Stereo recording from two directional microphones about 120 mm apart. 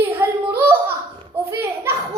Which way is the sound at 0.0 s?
20° right (ahead or behind).